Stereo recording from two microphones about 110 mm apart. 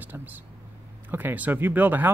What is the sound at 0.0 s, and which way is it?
Speech, 15° right (ahead or behind).